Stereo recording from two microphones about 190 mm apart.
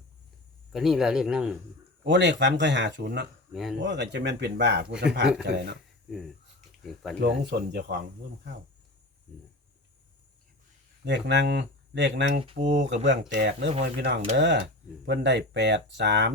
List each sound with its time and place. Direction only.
0.7 s speech: centre (ahead or behind)
2.0 s speech: 70° right (ahead or behind)
3.5 s speech: centre (ahead or behind)
3.8 s speech: 65° right (ahead or behind)
6.8 s speech: centre (ahead or behind)
7.2 s speech: 60° right (ahead or behind)
11.0 s speech: 65° right (ahead or behind)